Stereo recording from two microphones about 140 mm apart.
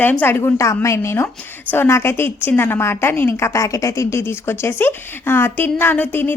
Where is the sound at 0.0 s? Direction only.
15° left (ahead or behind).